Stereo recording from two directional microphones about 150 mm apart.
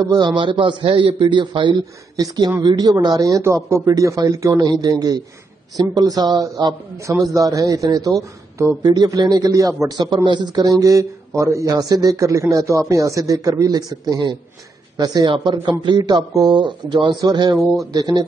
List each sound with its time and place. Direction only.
0.0 s a man's voice: 25° right (ahead or behind)